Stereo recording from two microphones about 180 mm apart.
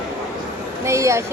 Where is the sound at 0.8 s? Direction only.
15° right (ahead or behind).